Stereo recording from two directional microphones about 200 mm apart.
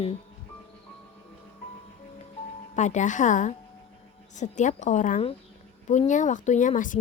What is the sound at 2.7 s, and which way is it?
A woman's voice, 35° left (ahead or behind).